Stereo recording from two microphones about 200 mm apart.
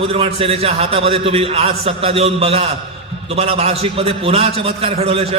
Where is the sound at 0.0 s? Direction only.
30° right (ahead or behind).